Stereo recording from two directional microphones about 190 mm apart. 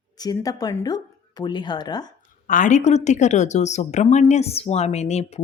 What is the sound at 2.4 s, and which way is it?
Speech, 40° left (ahead or behind).